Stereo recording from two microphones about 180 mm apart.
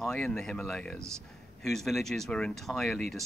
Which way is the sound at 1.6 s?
Centre (ahead or behind).